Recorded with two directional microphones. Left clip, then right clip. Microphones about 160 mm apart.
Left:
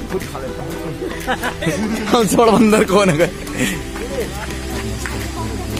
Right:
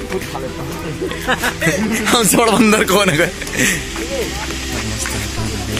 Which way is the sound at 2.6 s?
5° left (ahead or behind).